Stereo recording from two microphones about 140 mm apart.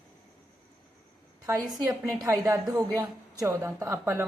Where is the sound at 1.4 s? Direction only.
25° right (ahead or behind).